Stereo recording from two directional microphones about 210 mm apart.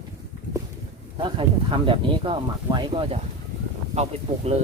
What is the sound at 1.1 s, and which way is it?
Speech, 25° right (ahead or behind).